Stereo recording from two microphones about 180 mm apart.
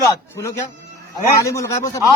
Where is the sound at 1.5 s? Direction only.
20° left (ahead or behind).